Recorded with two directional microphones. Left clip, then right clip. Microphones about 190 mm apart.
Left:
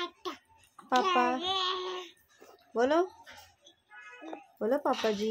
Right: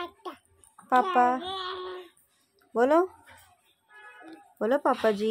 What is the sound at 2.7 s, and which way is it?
Speech, 35° right (ahead or behind).